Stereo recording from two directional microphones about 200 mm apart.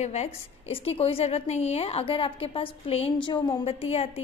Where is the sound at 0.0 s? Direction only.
35° left (ahead or behind).